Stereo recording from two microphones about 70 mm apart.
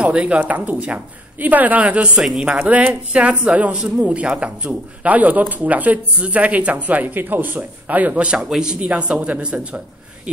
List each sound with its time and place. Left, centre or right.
0.0 s a woman's voice: centre